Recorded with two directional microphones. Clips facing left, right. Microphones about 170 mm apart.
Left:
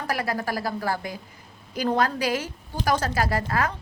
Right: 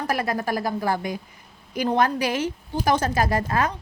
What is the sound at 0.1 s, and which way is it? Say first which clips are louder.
A woman's voice: right 1 dB; 20° right (ahead or behind).